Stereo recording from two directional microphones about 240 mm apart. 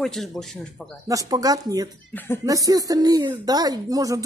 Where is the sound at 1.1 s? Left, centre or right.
Centre.